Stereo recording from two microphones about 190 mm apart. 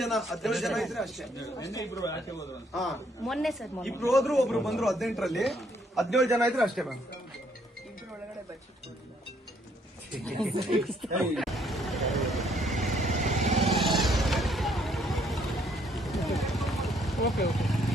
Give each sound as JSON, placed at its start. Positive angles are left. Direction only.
{"t": 0.0, "sound": "speech", "side_deg": 0}
{"t": 1.4, "sound": "speech", "side_deg": 20}
{"t": 2.7, "sound": "speech", "side_deg": 0}
{"t": 10.4, "sound": "vehicle", "side_deg": 0}
{"t": 13.0, "sound": "vehicle", "side_deg": -40}
{"t": 13.6, "sound": "vehicle", "side_deg": 0}